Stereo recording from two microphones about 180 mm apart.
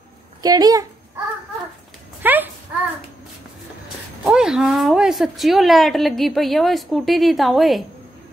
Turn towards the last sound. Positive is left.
turn(degrees=0)  # may be behind; listen again after turning